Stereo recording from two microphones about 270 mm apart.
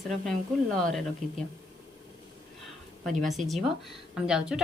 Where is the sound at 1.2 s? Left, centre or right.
Right.